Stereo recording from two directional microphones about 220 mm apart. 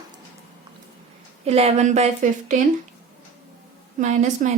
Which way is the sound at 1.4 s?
30° right (ahead or behind).